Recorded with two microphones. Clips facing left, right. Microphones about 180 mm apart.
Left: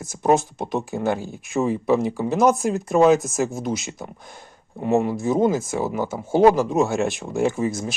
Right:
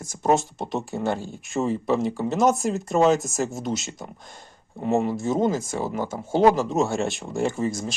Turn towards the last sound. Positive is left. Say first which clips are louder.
# left 3 dB
turn(degrees=5)  # may be behind; listen again after turning